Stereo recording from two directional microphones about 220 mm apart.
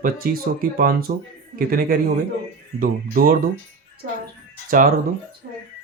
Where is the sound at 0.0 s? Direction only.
40° right (ahead or behind).